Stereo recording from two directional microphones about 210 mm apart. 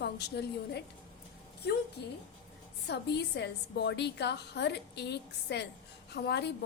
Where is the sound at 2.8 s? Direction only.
55° left (ahead or behind).